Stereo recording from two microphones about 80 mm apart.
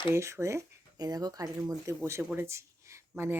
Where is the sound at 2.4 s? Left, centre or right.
Right.